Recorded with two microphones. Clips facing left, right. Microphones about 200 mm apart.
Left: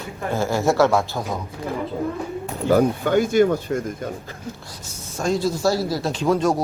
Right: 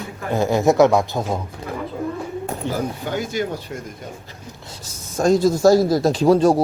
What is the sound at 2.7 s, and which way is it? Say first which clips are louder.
Speech: left 10 dB; 50° left (ahead or behind).